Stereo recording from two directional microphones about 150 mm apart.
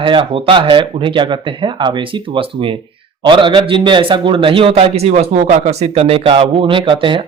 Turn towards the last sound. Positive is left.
turn(degrees=-35)  # may be behind; listen again after turning